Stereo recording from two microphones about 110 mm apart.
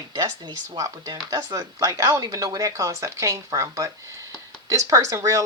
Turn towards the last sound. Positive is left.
turn(degrees=-30)  # may be behind; listen again after turning